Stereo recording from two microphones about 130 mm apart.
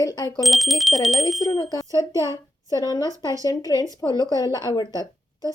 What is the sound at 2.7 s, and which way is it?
A woman's voice, 30° left (ahead or behind).